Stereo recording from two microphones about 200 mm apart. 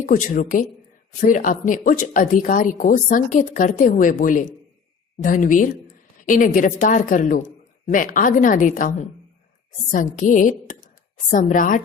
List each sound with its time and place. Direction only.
0.0 s a woman's voice: 40° left (ahead or behind)